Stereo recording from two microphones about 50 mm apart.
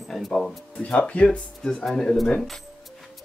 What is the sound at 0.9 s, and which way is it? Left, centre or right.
Speech, left.